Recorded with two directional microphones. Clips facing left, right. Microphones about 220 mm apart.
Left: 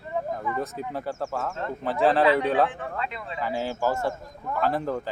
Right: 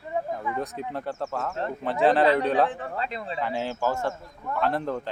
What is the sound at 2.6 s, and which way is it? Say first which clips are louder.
Speech: right 1 dB; 35° right (ahead or behind).